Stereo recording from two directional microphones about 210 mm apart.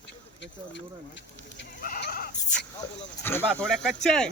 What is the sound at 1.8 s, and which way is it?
Goat, 40° left (ahead or behind).